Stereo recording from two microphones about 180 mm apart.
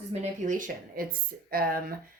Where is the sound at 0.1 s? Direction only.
45° right (ahead or behind).